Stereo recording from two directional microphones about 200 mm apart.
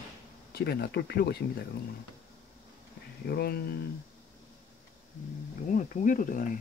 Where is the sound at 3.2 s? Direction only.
50° left (ahead or behind).